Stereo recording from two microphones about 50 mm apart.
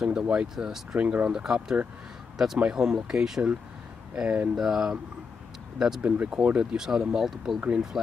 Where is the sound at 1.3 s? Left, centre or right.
Centre.